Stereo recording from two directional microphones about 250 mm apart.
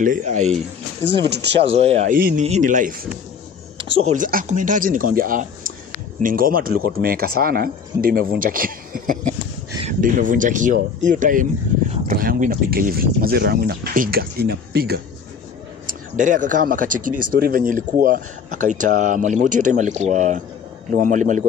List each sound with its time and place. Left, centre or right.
0.0 s speech: right
1.1 s speech: right
1.6 s speech: right
2.1 s speech: right
2.4 s speech: right
4.1 s speech: right